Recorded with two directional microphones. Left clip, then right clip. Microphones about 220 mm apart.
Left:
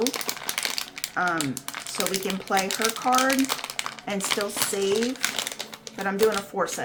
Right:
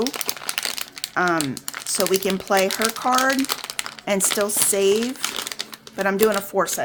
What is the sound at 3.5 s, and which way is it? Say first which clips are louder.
Crumpling: right 2 dB; 5° right (ahead or behind).